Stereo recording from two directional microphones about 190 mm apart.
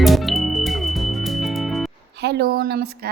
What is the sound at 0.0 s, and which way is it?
Music, centre (ahead or behind).